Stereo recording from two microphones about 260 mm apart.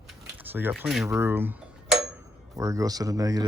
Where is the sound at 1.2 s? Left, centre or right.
Centre.